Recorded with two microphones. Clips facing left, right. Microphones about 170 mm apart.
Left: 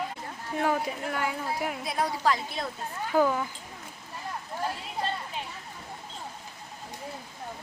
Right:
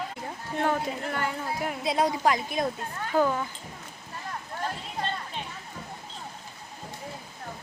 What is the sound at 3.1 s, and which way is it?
Speech, 5° left (ahead or behind).